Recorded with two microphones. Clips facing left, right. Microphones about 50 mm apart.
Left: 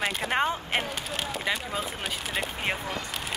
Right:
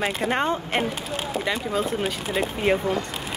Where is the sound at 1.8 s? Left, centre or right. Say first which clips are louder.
Right 7 dB; right.